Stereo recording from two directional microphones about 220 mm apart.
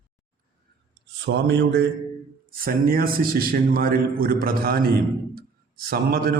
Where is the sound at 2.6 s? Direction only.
40° right (ahead or behind).